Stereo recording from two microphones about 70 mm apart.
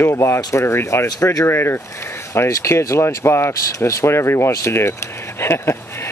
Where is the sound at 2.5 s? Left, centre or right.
Left.